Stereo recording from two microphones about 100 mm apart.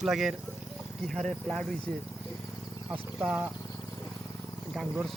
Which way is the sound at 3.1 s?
10° right (ahead or behind).